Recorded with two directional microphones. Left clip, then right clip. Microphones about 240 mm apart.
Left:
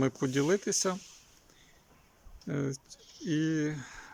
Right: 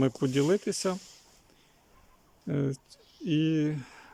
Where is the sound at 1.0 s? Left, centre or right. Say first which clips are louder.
Right 1 dB; right.